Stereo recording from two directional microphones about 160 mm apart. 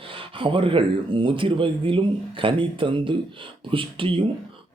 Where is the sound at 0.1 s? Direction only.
35° right (ahead or behind).